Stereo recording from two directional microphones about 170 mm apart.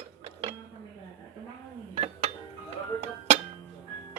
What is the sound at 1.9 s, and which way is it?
Dishes, 40° right (ahead or behind).